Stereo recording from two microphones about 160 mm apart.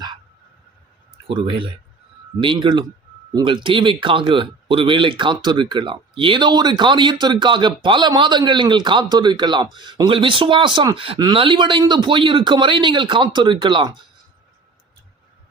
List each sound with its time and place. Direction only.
1.3 s speech: 30° right (ahead or behind)